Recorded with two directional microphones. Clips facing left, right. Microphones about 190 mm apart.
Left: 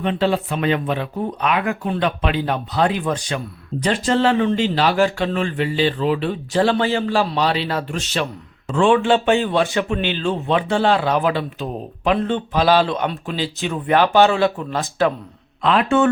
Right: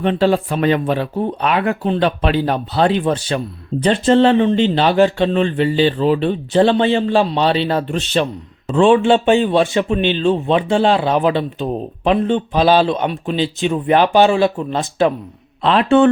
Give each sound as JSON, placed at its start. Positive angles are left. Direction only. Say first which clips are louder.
{"t": 0.0, "sound": "speech", "louder": "right 4 dB", "side_deg": -40}